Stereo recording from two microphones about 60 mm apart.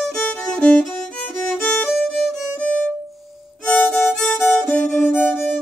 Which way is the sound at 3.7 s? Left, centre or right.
Left.